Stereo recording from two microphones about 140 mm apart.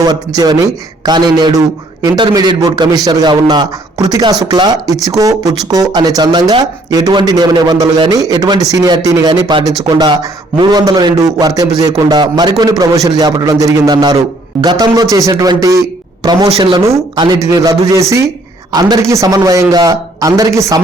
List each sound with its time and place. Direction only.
0.0 s a man's voice: 30° right (ahead or behind)
16.5 s speech: 45° right (ahead or behind)
16.7 s speech: 30° right (ahead or behind)